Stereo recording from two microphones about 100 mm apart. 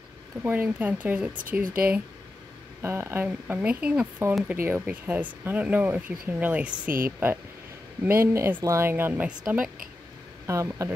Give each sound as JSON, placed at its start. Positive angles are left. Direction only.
{"t": 0.4, "sound": "speech", "side_deg": -20}
{"t": 10.4, "sound": "speech", "side_deg": -30}